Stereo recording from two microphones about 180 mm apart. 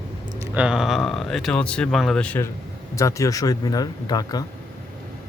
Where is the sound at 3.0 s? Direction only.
15° left (ahead or behind).